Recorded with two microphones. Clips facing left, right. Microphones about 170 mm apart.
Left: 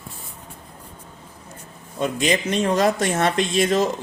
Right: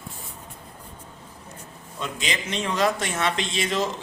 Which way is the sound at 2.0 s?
50° left (ahead or behind).